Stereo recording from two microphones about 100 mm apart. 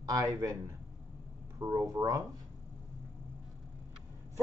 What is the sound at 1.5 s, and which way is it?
Speech, 35° right (ahead or behind).